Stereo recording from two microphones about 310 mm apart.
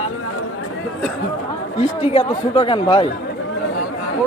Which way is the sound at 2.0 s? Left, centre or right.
Centre.